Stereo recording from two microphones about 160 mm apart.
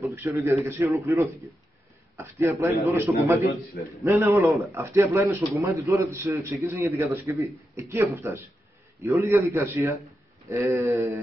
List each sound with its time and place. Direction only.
0.1 s a man's voice: 15° right (ahead or behind)